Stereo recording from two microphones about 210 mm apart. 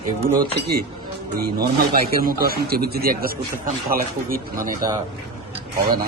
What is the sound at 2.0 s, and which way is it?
Speech, 45° right (ahead or behind).